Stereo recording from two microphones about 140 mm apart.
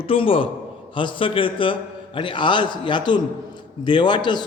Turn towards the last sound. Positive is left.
turn(degrees=30)  # may be behind; listen again after turning